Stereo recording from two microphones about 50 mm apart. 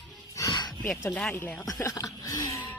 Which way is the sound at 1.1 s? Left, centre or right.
Left.